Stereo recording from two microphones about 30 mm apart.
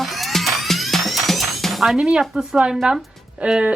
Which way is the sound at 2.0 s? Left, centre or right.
Right.